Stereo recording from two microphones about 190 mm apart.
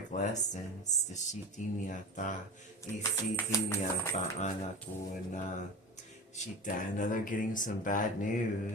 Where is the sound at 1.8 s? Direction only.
40° left (ahead or behind).